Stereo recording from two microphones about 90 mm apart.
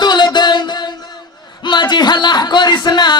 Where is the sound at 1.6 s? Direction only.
55° left (ahead or behind).